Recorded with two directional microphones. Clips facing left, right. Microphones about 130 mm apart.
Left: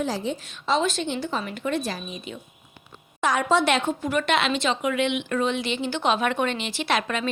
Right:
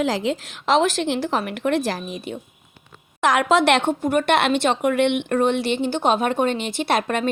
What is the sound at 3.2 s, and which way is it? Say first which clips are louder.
Speech: right 4 dB; 90° right.